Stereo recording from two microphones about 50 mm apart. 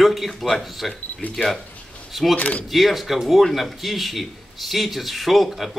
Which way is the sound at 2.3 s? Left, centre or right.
Left.